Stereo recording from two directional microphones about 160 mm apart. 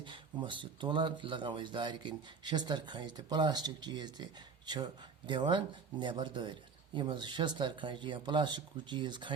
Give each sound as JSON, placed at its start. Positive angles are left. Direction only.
{"t": 0.0, "sound": "speech", "side_deg": -30}